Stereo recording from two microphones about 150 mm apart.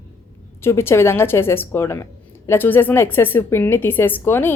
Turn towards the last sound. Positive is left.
turn(degrees=15)  # may be behind; listen again after turning